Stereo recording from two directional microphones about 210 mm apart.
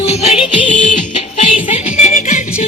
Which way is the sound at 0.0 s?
30° left (ahead or behind).